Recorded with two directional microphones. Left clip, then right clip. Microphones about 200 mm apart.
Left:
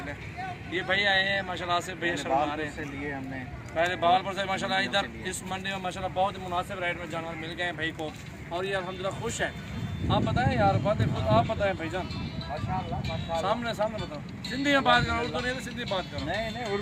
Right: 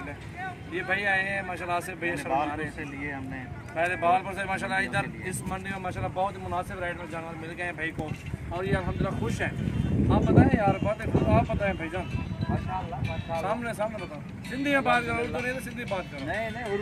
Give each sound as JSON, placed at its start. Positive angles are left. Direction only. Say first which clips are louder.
{"t": 0.7, "sound": "speech", "louder": "left 1 dB", "side_deg": -15}
{"t": 3.8, "sound": "speech", "louder": "even", "side_deg": -5}
{"t": 13.3, "sound": "speech", "louder": "left 1 dB", "side_deg": -5}